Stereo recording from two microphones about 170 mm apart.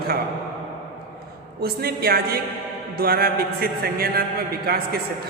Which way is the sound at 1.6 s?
65° right (ahead or behind).